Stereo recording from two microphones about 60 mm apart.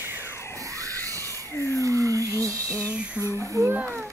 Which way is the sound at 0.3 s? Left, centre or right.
Left.